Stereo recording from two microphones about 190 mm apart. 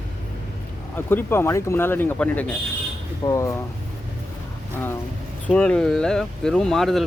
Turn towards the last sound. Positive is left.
turn(degrees=0)  # may be behind; listen again after turning